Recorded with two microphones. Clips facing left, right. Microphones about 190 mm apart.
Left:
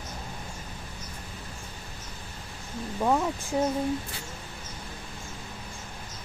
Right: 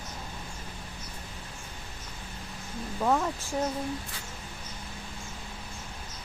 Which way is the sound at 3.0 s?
10° left (ahead or behind).